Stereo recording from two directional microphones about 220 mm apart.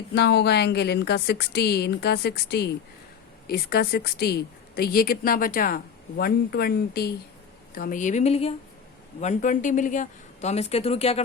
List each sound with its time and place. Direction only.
0.1 s speech: 50° left (ahead or behind); by 11.2 s 30° left (ahead or behind)